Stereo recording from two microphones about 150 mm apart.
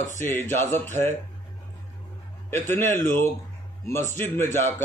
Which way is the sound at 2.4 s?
15° left (ahead or behind).